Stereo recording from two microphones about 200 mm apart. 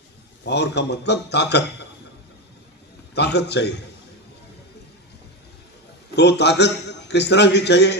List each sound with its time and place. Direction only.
0.4 s a man's voice: 60° left (ahead or behind)
3.2 s a man's voice: 55° left (ahead or behind)
6.1 s a man's voice: 60° left (ahead or behind)